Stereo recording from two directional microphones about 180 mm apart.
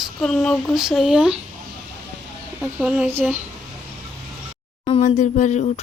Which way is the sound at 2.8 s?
5° right (ahead or behind).